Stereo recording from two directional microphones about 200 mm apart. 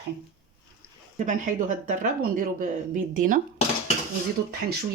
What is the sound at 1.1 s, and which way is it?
Speech, 40° right (ahead or behind).